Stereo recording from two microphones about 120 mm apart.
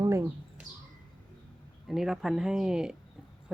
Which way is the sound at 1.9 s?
5° right (ahead or behind).